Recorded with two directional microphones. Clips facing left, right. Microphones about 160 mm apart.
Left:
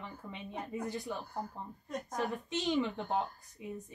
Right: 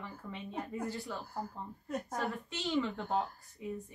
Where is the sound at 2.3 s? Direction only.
20° left (ahead or behind).